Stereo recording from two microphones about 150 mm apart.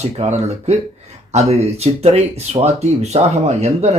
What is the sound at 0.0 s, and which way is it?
Speech, 50° right (ahead or behind).